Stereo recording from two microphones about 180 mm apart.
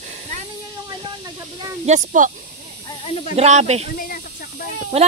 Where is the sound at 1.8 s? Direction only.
40° right (ahead or behind).